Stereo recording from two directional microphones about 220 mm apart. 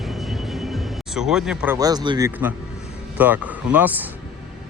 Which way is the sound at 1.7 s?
15° right (ahead or behind).